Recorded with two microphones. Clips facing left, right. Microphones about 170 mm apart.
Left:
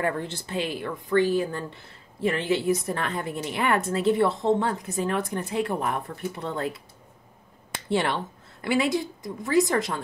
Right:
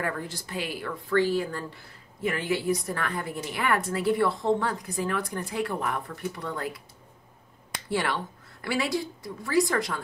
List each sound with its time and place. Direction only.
0.0 s a woman's voice: 25° left (ahead or behind)